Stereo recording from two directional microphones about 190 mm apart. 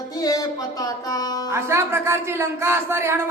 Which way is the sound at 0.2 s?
20° left (ahead or behind).